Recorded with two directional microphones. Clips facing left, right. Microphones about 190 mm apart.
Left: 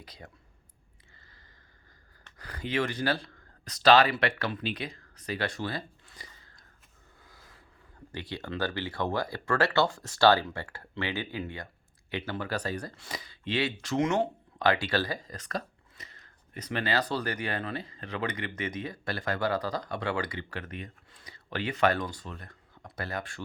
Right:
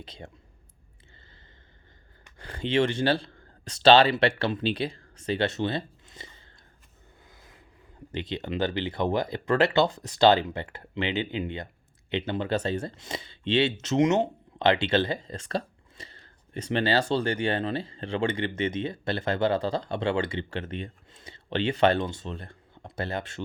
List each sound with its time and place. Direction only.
0.0 s speech: 25° right (ahead or behind)
2.4 s speech: 25° right (ahead or behind)
7.3 s a sound: 20° right (ahead or behind)
8.1 s speech: 20° right (ahead or behind)